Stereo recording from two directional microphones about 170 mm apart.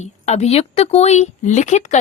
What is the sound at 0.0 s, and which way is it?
A woman's voice, 40° left (ahead or behind).